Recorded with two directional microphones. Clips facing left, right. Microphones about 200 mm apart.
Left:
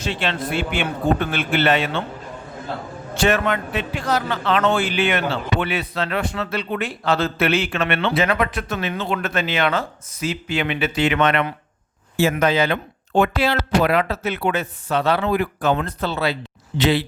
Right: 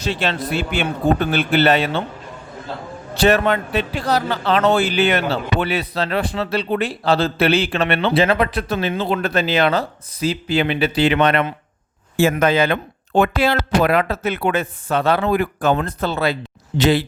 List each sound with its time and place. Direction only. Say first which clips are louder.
0.0 s speech: right 2 dB; 40° right (ahead or behind)
3.2 s speech: right 4 dB; 35° right (ahead or behind)
12.1 s speech: right 2 dB; 50° right (ahead or behind)